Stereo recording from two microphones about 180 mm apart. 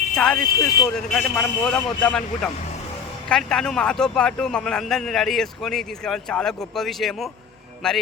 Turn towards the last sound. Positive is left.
turn(degrees=5)  # may be behind; listen again after turning